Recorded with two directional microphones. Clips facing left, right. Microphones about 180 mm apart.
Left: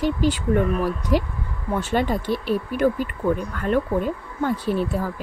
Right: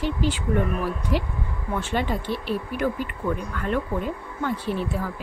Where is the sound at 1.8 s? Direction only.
40° left (ahead or behind).